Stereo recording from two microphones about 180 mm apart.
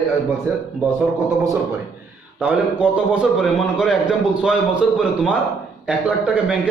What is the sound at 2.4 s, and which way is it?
A man's voice, 10° right (ahead or behind).